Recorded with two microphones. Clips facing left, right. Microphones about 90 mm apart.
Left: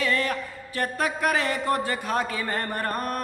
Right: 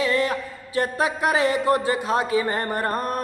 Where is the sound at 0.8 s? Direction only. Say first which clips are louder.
Right 3 dB; 25° right (ahead or behind).